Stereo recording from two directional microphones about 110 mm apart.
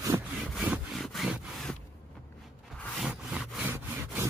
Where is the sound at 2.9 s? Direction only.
5° right (ahead or behind).